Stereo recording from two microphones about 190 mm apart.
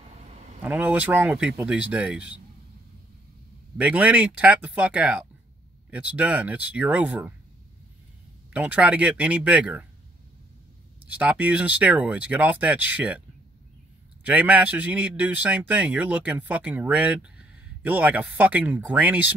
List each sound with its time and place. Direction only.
0.3 s a sound: 35° right (ahead or behind)
0.7 s a man's voice: 5° right (ahead or behind)
3.7 s a man's voice: 5° right (ahead or behind)
8.5 s a man's voice: 10° right (ahead or behind)
11.1 s a man's voice: 10° right (ahead or behind)
14.2 s a man's voice: 10° right (ahead or behind)